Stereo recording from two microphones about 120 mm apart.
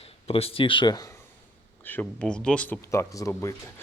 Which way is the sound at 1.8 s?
15° left (ahead or behind).